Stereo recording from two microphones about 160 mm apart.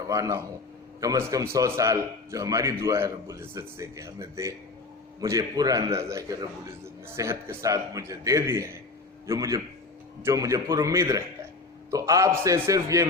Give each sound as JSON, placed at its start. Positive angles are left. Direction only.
{"t": 0.1, "sound": "a man's voice", "side_deg": -20}